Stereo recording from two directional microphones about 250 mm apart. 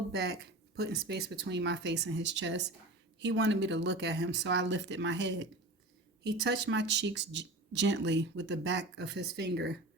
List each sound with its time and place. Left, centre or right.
0.1 s speech: right